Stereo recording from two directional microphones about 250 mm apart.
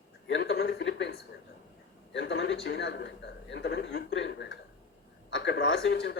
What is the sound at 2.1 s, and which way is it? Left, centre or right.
A man's voice, left.